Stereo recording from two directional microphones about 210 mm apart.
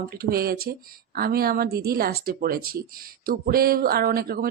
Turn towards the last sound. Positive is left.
turn(degrees=-45)  # may be behind; listen again after turning